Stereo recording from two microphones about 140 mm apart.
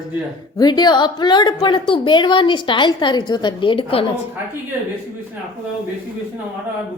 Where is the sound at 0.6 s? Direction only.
30° left (ahead or behind).